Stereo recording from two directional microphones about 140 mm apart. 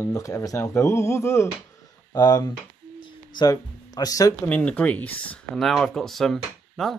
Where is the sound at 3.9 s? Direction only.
25° left (ahead or behind).